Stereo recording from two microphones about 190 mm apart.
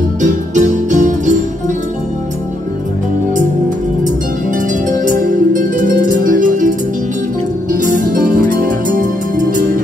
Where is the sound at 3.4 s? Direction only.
45° right (ahead or behind).